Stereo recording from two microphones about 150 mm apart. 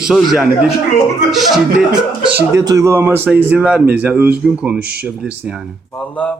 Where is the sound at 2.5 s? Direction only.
20° right (ahead or behind).